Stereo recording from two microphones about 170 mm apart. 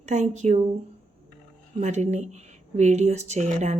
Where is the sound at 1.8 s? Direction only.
40° right (ahead or behind).